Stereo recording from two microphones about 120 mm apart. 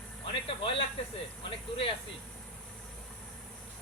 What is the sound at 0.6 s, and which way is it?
Speech, 50° left (ahead or behind).